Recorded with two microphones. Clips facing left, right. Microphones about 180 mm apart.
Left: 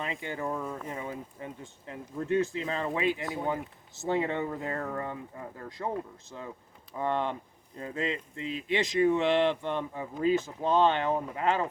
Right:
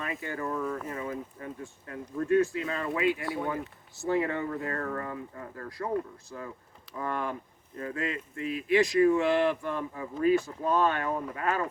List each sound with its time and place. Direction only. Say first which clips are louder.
0.0 s speech: even; 20° left (ahead or behind)
6.9 s speech: left 3 dB; 25° left (ahead or behind)